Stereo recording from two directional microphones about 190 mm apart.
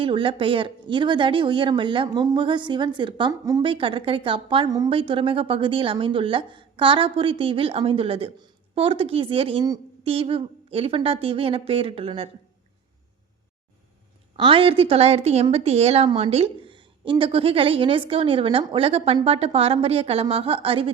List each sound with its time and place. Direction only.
0.0 s speech: 25° right (ahead or behind)
14.3 s speech: 30° right (ahead or behind)